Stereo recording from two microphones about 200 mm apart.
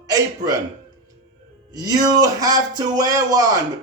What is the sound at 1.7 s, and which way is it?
Speech, 20° right (ahead or behind).